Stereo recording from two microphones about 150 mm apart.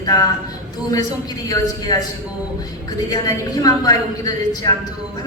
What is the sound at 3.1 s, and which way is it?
A man's voice, 25° left (ahead or behind).